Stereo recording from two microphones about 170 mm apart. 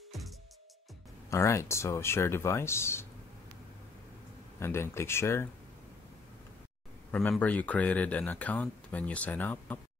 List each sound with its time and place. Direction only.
1.3 s speech: 15° left (ahead or behind)
4.6 s speech: 15° left (ahead or behind)
7.1 s speech: 10° left (ahead or behind)